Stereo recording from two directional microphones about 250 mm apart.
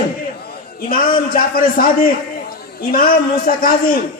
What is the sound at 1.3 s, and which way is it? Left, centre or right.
A man's voice, left.